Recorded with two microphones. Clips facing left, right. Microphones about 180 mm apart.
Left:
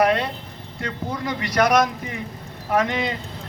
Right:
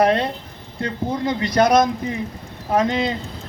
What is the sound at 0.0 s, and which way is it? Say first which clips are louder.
Speech: right 2 dB; 25° right (ahead or behind).